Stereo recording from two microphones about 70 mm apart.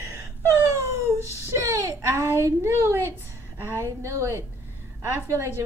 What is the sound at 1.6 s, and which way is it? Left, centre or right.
A child's voice, right.